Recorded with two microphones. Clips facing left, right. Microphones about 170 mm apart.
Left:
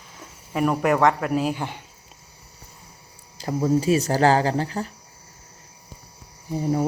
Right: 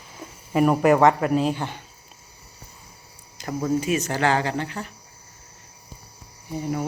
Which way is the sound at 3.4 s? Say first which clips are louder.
Left 3 dB; 30° left (ahead or behind).